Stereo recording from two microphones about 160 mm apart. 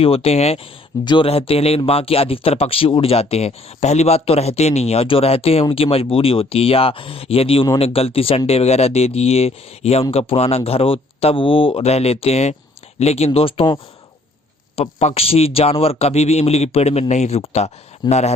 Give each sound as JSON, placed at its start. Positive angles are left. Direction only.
{"t": 0.0, "sound": "speech", "side_deg": 35}
{"t": 14.8, "sound": "speech", "side_deg": 40}
{"t": 18.0, "sound": "a man's voice", "side_deg": 25}